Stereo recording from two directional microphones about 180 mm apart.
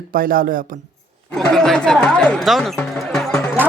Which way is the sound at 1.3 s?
5° left (ahead or behind).